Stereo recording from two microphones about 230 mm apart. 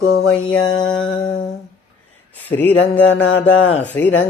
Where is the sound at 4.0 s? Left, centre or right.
Centre.